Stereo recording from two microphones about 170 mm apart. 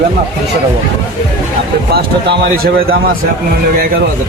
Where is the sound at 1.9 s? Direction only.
65° right (ahead or behind).